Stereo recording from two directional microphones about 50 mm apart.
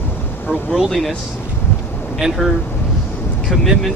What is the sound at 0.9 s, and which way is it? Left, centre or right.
Speech, centre.